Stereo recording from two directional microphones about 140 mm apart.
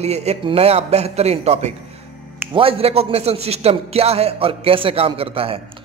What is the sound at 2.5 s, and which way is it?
A man's voice, 40° right (ahead or behind).